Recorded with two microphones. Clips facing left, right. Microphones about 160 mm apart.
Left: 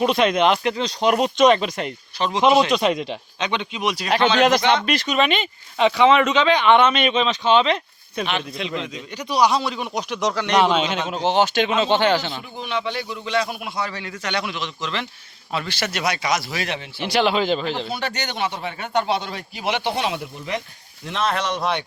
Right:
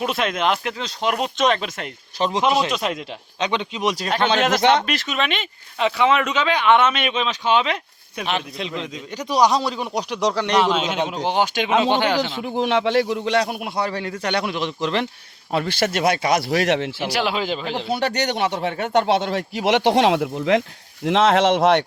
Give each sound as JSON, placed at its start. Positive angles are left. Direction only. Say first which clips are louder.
{"t": 0.0, "sound": "speech", "louder": "left 4 dB", "side_deg": -5}
{"t": 3.4, "sound": "a man's voice", "louder": "right 2 dB", "side_deg": -35}
{"t": 4.4, "sound": "speech", "louder": "even", "side_deg": 0}
{"t": 8.8, "sound": "a man's voice", "louder": "right 1 dB", "side_deg": -40}
{"t": 10.6, "sound": "speech", "louder": "left 2 dB", "side_deg": 0}
{"t": 12.4, "sound": "speech", "louder": "right 7 dB", "side_deg": -85}
{"t": 17.0, "sound": "speech", "louder": "left 3 dB", "side_deg": -5}
{"t": 17.8, "sound": "speech", "louder": "right 6 dB", "side_deg": -70}